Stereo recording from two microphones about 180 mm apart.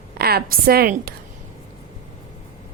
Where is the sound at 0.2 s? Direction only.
60° right (ahead or behind).